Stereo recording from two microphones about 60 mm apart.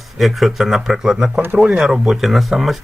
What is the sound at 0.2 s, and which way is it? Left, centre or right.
Speech, centre.